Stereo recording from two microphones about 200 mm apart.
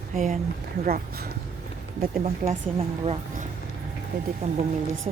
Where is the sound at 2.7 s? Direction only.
30° right (ahead or behind).